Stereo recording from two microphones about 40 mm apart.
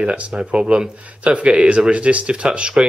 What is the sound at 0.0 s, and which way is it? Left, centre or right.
Speech, right.